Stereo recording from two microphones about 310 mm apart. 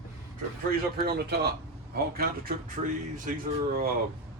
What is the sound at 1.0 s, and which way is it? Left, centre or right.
Speech, right.